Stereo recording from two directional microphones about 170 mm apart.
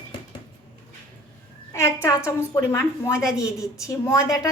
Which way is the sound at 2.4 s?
15° left (ahead or behind).